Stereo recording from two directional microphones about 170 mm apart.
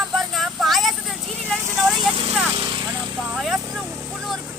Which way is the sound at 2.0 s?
30° right (ahead or behind).